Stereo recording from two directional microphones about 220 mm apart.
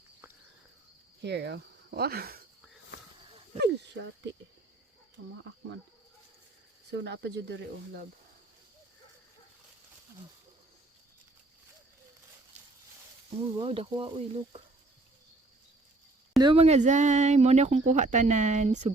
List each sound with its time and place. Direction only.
1.2 s speech: 50° right (ahead or behind)
3.6 s speech: 50° right (ahead or behind)
6.9 s speech: 50° right (ahead or behind)
13.6 s speech: 25° right (ahead or behind)
16.4 s speech: 25° right (ahead or behind)